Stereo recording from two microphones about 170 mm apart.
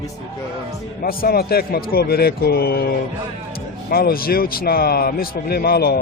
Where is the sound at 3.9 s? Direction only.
60° left (ahead or behind).